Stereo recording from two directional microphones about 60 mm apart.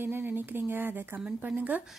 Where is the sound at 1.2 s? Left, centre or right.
Right.